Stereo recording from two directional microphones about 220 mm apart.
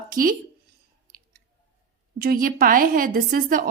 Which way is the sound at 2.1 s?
40° right (ahead or behind).